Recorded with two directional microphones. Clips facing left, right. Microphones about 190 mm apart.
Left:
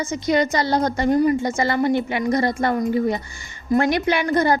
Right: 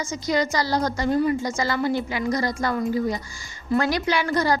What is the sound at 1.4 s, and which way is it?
A child's voice, 55° left (ahead or behind).